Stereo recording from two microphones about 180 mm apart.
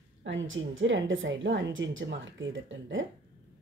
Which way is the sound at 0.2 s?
90° right.